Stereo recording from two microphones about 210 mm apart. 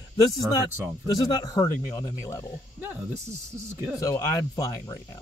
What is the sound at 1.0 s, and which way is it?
Speech, 20° left (ahead or behind).